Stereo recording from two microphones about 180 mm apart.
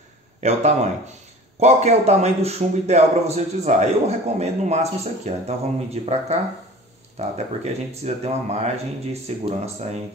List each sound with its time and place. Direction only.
0.4 s a man's voice: 40° right (ahead or behind)